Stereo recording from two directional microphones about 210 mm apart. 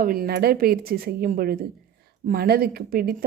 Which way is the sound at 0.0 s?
45° right (ahead or behind).